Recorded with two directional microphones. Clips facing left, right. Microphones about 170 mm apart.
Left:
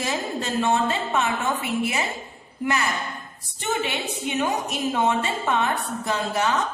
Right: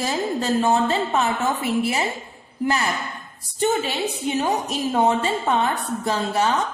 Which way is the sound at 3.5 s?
35° right (ahead or behind).